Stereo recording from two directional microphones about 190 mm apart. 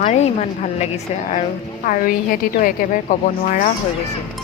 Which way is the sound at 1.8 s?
45° left (ahead or behind).